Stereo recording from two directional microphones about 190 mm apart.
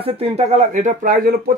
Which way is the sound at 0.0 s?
35° right (ahead or behind).